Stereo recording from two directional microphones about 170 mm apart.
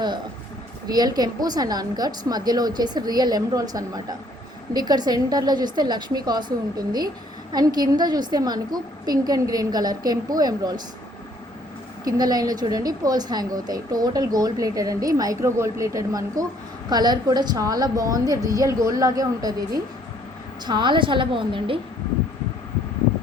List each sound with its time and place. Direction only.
0.9 s speech: 25° right (ahead or behind)
12.0 s speech: 20° right (ahead or behind)